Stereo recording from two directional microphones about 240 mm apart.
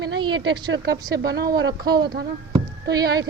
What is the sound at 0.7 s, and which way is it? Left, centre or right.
Speech, right.